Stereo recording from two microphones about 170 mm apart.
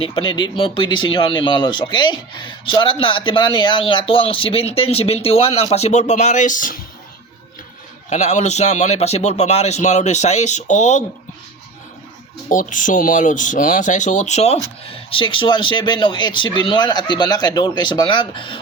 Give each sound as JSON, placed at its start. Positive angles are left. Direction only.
{"t": 0.0, "sound": "speech", "side_deg": 30}
{"t": 8.1, "sound": "speech", "side_deg": 45}
{"t": 12.5, "sound": "speech", "side_deg": 50}